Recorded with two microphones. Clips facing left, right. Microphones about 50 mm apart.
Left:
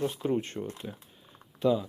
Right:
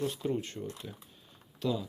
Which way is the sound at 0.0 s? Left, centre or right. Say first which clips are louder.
Left 3 dB; centre.